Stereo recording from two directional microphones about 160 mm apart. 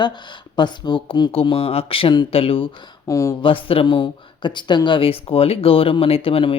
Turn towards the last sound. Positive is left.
turn(degrees=35)  # may be behind; listen again after turning